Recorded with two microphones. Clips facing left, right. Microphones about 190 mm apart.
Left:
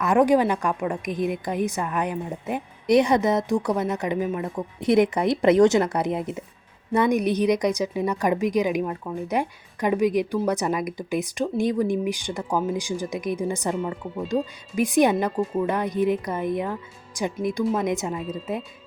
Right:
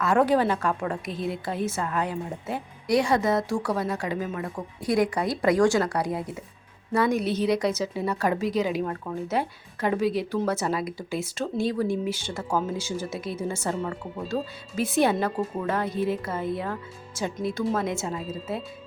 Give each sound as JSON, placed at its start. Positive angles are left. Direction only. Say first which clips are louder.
{"t": 0.0, "sound": "a woman's voice", "louder": "left 3 dB", "side_deg": 15}